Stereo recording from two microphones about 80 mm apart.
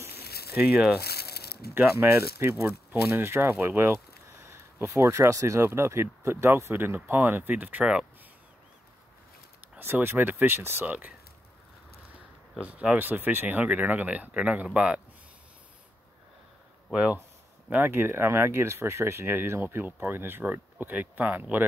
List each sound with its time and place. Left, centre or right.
0.6 s speech: centre
1.8 s speech: right; by 8.0 s centre
9.6 s speech: right
12.5 s speech: centre
16.9 s speech: centre